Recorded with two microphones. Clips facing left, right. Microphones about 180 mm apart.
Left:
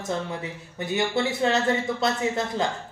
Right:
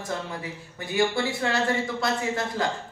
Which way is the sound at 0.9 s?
20° left (ahead or behind).